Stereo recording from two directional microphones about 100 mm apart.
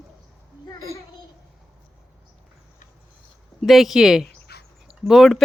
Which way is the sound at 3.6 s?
Centre (ahead or behind).